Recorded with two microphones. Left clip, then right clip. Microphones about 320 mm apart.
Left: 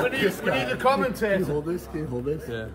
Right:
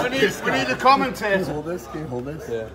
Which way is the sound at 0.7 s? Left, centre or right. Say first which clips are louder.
Right 8 dB; right.